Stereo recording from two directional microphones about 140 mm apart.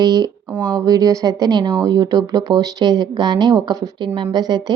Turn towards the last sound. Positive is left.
turn(degrees=-30)  # may be behind; listen again after turning